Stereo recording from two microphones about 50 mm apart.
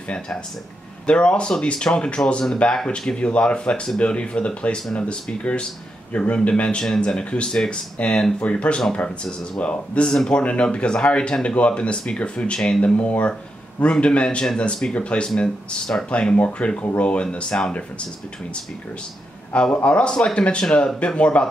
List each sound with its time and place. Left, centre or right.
1.0 s speech: left
16.1 s speech: left
19.5 s speech: left